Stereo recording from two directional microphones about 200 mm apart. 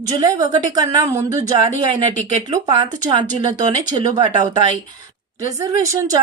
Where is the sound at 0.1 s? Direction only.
20° right (ahead or behind).